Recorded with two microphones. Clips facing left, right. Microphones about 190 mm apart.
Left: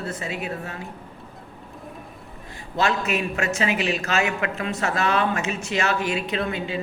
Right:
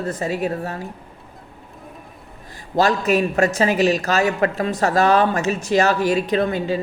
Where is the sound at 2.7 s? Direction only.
40° right (ahead or behind).